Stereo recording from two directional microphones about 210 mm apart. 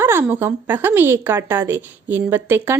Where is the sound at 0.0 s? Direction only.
10° right (ahead or behind).